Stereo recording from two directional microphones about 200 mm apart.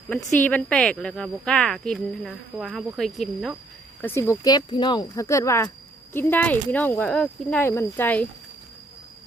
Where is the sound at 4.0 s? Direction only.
10° left (ahead or behind).